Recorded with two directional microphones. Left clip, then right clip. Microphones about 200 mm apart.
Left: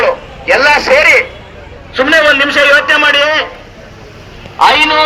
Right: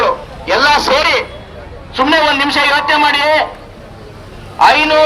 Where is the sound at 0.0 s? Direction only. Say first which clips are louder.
Left 2 dB; 60° right (ahead or behind).